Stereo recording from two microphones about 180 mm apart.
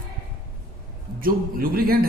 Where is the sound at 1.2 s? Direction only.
50° right (ahead or behind).